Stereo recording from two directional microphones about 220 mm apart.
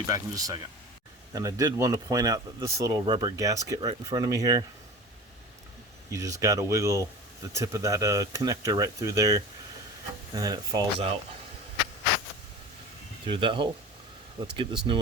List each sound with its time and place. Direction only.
0.1 s speech: 15° right (ahead or behind)
6.1 s speech: 15° right (ahead or behind)
13.2 s speech: 20° right (ahead or behind)